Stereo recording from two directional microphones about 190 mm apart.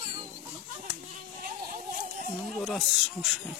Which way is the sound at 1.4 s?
45° right (ahead or behind).